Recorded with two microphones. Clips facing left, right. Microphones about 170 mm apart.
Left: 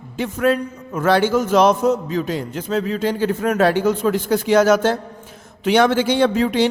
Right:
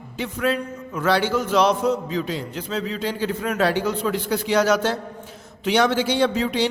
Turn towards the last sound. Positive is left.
turn(degrees=50)  # may be behind; listen again after turning